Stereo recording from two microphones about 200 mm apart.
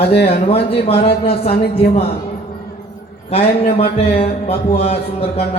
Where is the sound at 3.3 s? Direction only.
30° left (ahead or behind).